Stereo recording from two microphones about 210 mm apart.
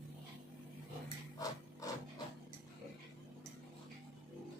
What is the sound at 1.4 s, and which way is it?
Wood, 15° left (ahead or behind).